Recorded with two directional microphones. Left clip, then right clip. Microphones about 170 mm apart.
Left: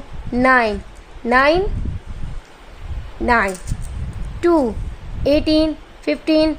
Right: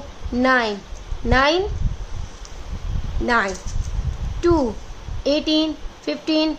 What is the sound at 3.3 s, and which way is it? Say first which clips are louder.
A woman's voice: left 3 dB; 30° left (ahead or behind).